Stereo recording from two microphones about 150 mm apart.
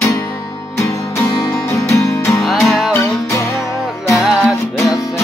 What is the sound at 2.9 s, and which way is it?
Music, 20° left (ahead or behind).